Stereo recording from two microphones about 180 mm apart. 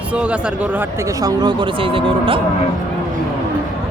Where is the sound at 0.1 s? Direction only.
5° right (ahead or behind); by 2.4 s 30° right (ahead or behind).